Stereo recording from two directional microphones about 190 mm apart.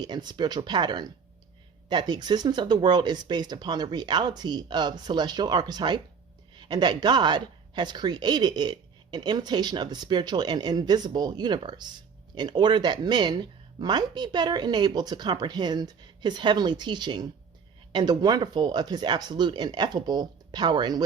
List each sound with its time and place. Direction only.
0.0 s speech: 20° right (ahead or behind)